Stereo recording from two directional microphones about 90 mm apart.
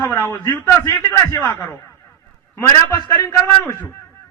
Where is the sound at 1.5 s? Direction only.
25° left (ahead or behind).